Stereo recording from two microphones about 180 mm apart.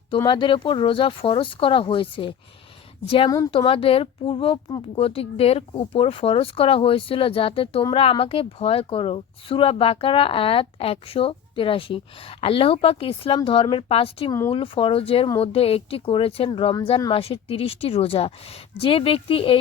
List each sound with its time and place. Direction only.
0.3 s speech: 25° left (ahead or behind)